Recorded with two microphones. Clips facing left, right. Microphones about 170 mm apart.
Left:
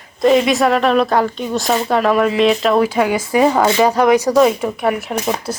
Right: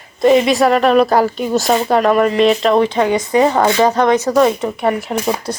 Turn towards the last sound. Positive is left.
turn(degrees=5)  # may be behind; listen again after turning